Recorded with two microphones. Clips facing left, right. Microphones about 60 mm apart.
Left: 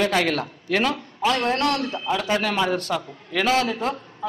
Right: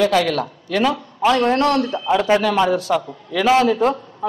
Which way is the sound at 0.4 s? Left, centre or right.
Centre.